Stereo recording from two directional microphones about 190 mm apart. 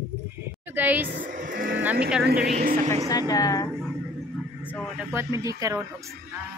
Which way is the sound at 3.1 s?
20° left (ahead or behind).